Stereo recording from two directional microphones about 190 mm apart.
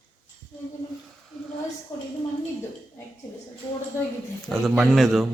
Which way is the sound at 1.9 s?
20° left (ahead or behind).